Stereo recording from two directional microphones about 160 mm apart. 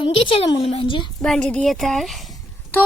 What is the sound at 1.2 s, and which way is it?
A woman's voice, 5° left (ahead or behind).